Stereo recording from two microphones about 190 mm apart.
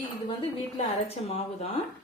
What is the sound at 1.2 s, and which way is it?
Speech, 30° left (ahead or behind).